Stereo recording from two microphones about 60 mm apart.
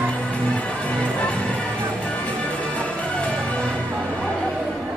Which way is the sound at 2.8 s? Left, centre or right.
Centre.